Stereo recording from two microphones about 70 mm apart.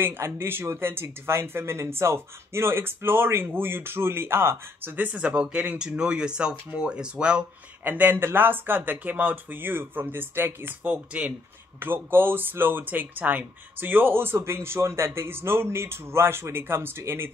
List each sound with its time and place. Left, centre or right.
0.0 s speech: right; by 7.4 s centre
7.8 s speech: right